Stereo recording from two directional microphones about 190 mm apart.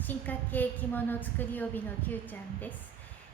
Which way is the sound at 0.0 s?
10° left (ahead or behind).